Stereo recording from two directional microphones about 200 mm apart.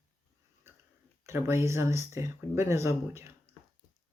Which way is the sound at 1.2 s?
15° right (ahead or behind).